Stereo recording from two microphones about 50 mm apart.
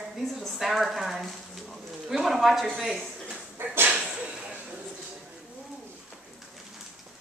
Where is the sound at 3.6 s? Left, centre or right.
Right.